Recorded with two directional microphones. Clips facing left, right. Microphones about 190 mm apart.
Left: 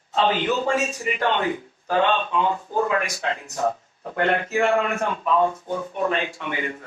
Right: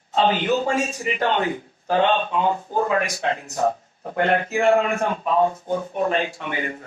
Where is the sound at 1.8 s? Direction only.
40° right (ahead or behind).